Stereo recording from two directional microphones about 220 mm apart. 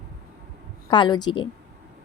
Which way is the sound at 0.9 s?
20° left (ahead or behind).